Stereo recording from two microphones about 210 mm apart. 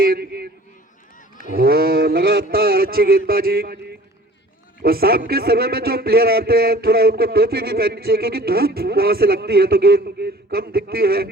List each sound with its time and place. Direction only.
0.0 s a sound: 45° right (ahead or behind)
1.4 s a man's voice: 45° right (ahead or behind)
4.8 s a man's voice: 45° right (ahead or behind)